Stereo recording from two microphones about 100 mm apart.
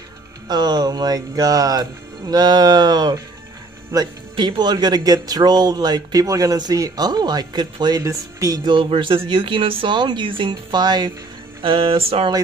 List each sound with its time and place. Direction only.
0.5 s speech: 45° right (ahead or behind)
8.0 s speech: 30° right (ahead or behind)
8.6 s speech: 55° right (ahead or behind)
11.6 s speech: 60° right (ahead or behind)